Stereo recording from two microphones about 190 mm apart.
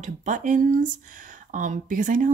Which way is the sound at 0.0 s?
40° right (ahead or behind).